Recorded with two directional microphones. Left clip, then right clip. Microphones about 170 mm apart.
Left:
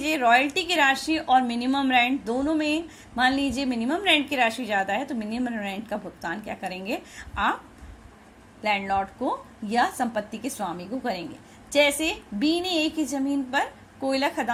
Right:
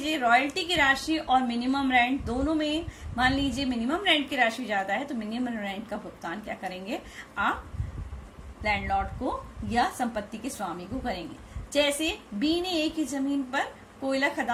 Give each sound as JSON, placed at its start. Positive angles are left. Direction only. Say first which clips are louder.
{"t": 0.0, "sound": "a woman's voice", "louder": "left 3 dB", "side_deg": 40}
{"t": 8.6, "sound": "a woman's voice", "louder": "left 3 dB", "side_deg": 45}
{"t": 11.7, "sound": "a woman's voice", "louder": "left 4 dB", "side_deg": 40}